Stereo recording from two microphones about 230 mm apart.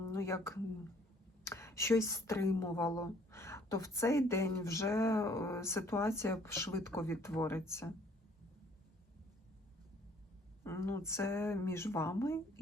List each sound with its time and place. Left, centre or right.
0.0 s a woman's voice: centre
10.6 s a woman's voice: centre